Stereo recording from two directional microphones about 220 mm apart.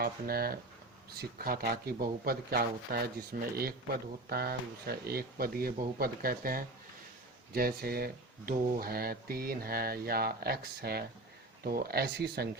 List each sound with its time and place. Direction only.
0.0 s speech: 45° right (ahead or behind)